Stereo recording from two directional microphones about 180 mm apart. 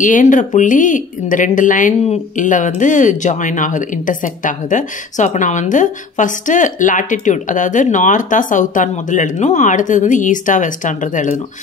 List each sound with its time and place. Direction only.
0.0 s speech: 45° left (ahead or behind)